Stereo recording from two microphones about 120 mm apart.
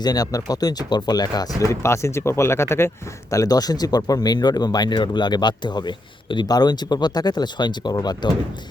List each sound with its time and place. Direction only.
0.0 s speech: 30° left (ahead or behind)
1.7 s speech: 25° left (ahead or behind)
3.3 s speech: 30° left (ahead or behind)